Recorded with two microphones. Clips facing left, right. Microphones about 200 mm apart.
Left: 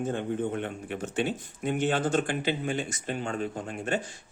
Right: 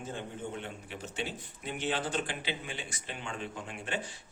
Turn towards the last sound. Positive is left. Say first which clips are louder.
# left 7 dB
turn(degrees=45)  # may be behind; listen again after turning